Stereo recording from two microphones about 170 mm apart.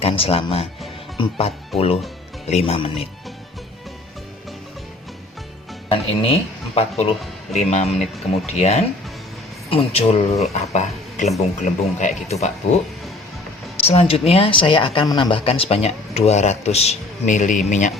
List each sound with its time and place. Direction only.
0.0 s speech: 35° left (ahead or behind)
5.9 s speech: 35° left (ahead or behind)
13.8 s speech: 35° left (ahead or behind)